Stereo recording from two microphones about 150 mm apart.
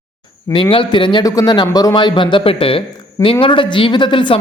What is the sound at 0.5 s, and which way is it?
A man's voice, 35° left (ahead or behind).